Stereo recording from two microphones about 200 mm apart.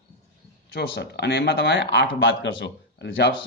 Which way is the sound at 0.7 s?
60° left (ahead or behind).